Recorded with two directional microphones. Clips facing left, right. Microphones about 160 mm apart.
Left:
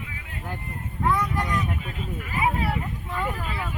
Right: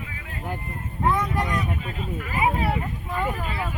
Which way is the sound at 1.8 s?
40° right (ahead or behind).